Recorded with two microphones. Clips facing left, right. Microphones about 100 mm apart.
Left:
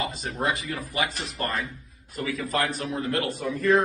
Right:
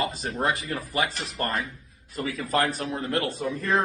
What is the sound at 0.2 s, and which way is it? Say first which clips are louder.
Speech: right 1 dB; 35° right (ahead or behind).